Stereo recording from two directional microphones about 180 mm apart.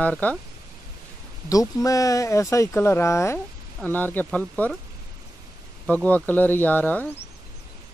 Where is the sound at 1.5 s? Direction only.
20° left (ahead or behind).